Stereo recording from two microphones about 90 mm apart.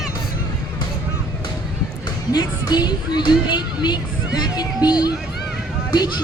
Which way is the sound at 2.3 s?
50° left (ahead or behind).